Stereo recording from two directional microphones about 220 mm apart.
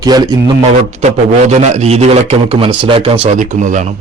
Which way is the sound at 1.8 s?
30° right (ahead or behind).